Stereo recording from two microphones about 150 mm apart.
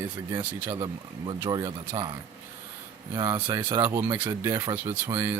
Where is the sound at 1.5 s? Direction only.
30° right (ahead or behind).